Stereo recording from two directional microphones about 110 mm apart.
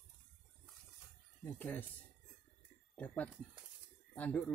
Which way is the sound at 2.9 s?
15° left (ahead or behind).